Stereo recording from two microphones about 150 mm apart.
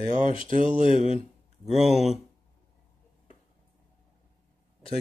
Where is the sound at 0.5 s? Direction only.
55° right (ahead or behind).